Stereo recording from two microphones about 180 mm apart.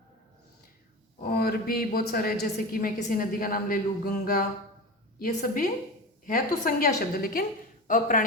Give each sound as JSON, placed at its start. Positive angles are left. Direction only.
{"t": 1.2, "sound": "a woman's voice", "side_deg": 55}
{"t": 6.7, "sound": "a woman's voice", "side_deg": 55}